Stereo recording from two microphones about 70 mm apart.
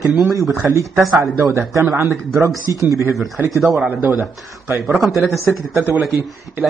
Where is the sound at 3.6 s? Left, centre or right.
Centre.